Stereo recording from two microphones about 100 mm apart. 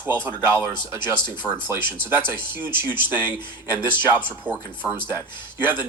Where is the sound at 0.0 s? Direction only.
20° right (ahead or behind).